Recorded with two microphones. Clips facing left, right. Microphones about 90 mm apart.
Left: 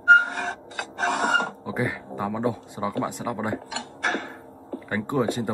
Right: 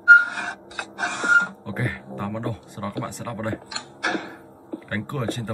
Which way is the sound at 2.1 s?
10° left (ahead or behind).